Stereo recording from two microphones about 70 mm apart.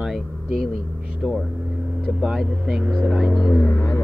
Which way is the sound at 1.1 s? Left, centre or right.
Centre.